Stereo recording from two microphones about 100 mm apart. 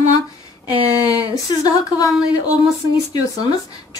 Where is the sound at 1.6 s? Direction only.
40° left (ahead or behind).